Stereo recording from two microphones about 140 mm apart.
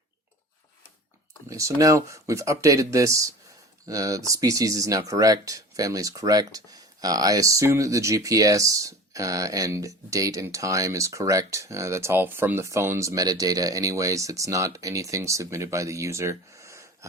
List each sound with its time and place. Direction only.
1.5 s speech: 25° right (ahead or behind)